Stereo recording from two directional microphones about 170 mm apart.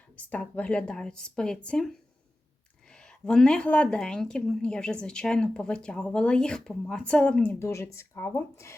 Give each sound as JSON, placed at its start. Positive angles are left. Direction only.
{"t": 0.3, "sound": "a woman's voice", "side_deg": 10}